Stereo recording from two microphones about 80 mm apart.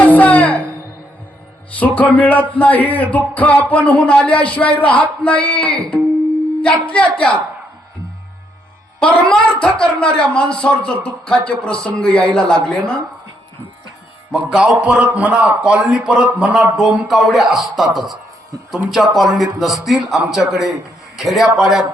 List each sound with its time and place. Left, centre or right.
0.0 s music: centre
1.7 s speech: centre
9.0 s speech: centre
14.5 s speech: centre
16.7 s speech: centre